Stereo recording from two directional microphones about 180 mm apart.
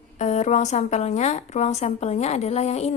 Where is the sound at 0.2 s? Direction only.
40° left (ahead or behind).